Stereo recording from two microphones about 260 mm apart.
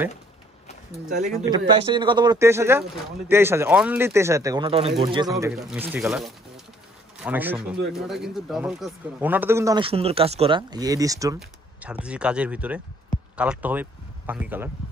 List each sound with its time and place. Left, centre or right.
1.4 s speech: centre
5.5 s speech: centre